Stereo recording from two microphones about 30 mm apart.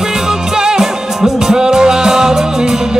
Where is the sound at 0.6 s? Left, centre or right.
Right.